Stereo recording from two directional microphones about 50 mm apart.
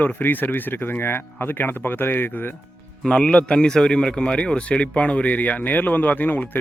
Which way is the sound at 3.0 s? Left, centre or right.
Centre.